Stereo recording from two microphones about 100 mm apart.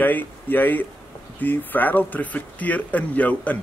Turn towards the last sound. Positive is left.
turn(degrees=15)  # may be behind; listen again after turning